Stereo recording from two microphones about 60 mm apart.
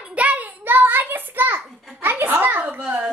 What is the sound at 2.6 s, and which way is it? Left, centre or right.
Speech, centre.